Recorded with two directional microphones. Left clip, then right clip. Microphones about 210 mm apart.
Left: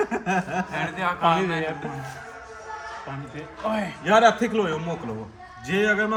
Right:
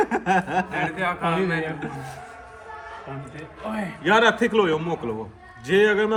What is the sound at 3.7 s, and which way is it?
Speech, 30° left (ahead or behind).